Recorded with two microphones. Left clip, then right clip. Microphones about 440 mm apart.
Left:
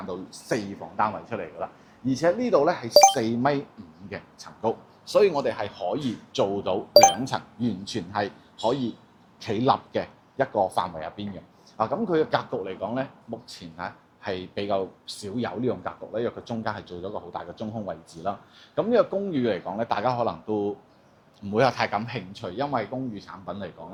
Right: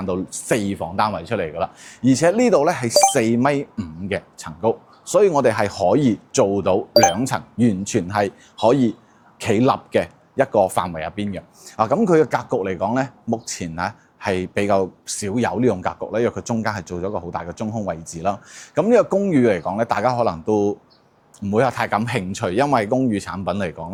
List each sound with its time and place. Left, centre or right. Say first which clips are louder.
0.1 s a man's voice: right 8 dB; right
2.9 s speech: left 1 dB; centre
3.2 s a man's voice: right 6 dB; right
5.1 s speech: right 6 dB; right
6.3 s a man's voice: right 7 dB; right
11.8 s a man's voice: right 8 dB; right
22.3 s speech: right 10 dB; right